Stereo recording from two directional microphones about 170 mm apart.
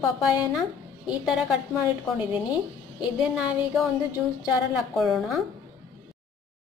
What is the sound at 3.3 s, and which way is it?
Speech, centre (ahead or behind).